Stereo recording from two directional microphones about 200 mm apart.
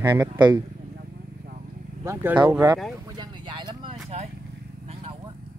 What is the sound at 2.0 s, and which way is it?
Speech, 15° right (ahead or behind).